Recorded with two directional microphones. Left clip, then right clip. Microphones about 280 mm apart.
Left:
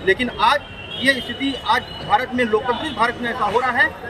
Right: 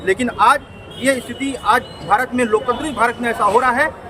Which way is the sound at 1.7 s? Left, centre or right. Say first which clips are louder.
Right 3 dB; centre.